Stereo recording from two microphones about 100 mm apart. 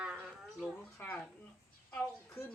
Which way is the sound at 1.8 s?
20° left (ahead or behind).